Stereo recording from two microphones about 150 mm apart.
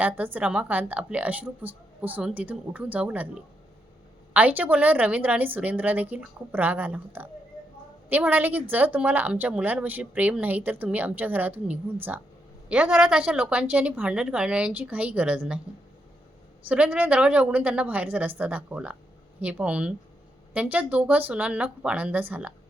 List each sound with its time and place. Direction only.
0.0 s speech: 10° right (ahead or behind)
16.6 s speech: 10° right (ahead or behind)